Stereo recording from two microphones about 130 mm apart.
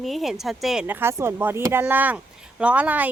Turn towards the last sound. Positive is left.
turn(degrees=-10)  # may be behind; listen again after turning